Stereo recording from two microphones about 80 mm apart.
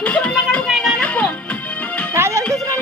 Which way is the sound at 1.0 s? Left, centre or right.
Centre.